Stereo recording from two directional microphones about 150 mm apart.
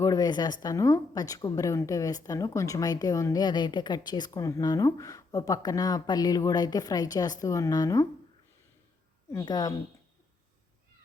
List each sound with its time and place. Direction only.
0.0 s a woman's voice: 25° left (ahead or behind)
9.3 s a woman's voice: 25° left (ahead or behind)